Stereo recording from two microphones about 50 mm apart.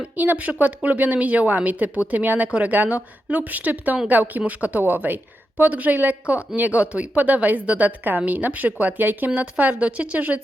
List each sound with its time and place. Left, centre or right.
0.2 s a woman's voice: right